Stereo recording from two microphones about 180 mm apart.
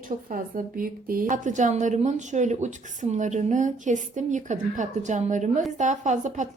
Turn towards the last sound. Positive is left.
turn(degrees=-45)  # may be behind; listen again after turning